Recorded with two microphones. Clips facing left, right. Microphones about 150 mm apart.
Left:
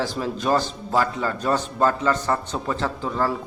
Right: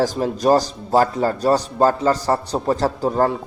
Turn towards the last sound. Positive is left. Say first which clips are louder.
# right 6 dB
turn(degrees=-40)  # may be behind; listen again after turning